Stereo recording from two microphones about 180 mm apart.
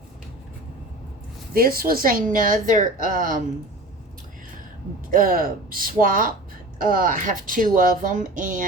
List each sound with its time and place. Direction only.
1.5 s a woman's voice: 55° right (ahead or behind)
5.1 s a woman's voice: 50° right (ahead or behind)